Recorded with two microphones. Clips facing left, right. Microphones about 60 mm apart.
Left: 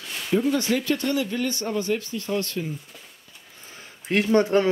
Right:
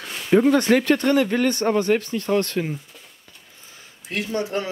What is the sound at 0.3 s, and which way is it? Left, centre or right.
Speech, right.